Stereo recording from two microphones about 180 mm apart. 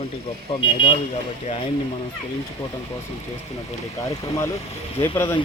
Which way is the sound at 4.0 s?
20° left (ahead or behind).